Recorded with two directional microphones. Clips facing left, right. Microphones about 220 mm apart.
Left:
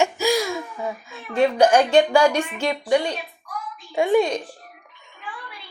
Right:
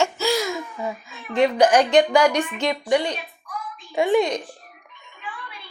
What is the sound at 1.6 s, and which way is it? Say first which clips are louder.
Speech: left 1 dB; 10° left (ahead or behind).